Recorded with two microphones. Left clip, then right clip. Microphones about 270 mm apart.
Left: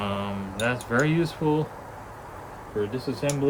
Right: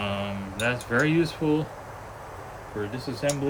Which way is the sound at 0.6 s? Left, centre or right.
Centre.